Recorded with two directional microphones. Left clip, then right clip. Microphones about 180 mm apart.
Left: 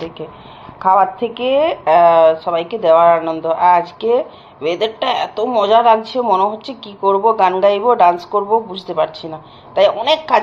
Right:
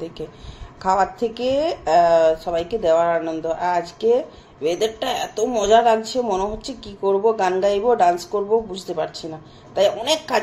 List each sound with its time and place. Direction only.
0.8 s speech: 20° right (ahead or behind)